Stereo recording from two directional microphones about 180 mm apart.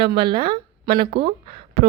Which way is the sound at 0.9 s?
60° right (ahead or behind).